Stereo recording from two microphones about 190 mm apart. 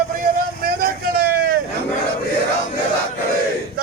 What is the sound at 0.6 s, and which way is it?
Vehicle, 50° right (ahead or behind).